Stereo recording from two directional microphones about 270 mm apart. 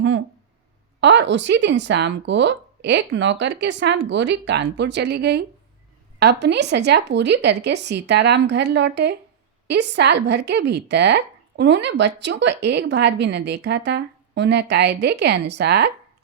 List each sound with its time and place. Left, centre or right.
1.0 s speech: right